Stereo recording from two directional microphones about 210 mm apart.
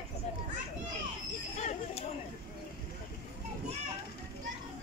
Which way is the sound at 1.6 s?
35° left (ahead or behind).